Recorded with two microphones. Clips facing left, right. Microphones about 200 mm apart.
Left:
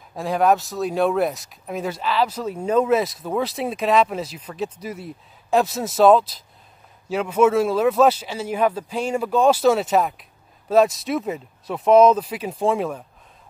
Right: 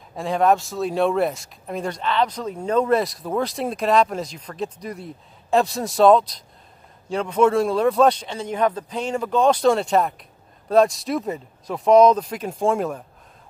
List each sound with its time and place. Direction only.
0.1 s speech: centre (ahead or behind)